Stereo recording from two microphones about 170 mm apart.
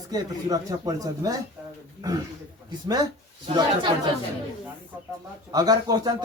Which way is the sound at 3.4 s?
25° right (ahead or behind).